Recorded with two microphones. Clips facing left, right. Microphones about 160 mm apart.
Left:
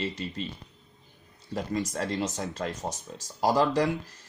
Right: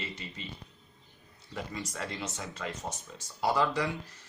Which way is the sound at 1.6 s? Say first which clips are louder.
Left 8 dB; 45° left (ahead or behind).